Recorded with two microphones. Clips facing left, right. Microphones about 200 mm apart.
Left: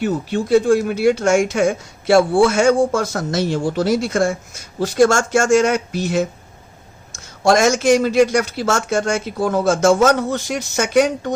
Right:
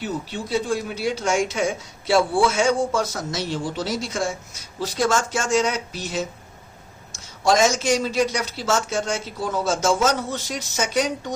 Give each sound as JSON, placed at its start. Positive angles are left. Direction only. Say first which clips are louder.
{"t": 0.0, "sound": "a man's voice", "louder": "left 8 dB", "side_deg": 55}